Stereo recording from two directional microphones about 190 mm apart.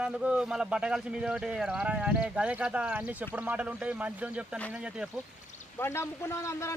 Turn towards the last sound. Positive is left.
turn(degrees=15)  # may be behind; listen again after turning